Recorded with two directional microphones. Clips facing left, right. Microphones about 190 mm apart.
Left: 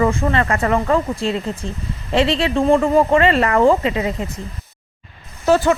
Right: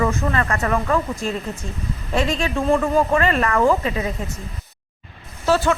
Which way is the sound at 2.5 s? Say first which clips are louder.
Left 4 dB; 30° left (ahead or behind).